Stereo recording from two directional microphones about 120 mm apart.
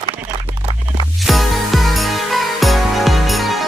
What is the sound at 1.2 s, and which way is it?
Music, centre (ahead or behind).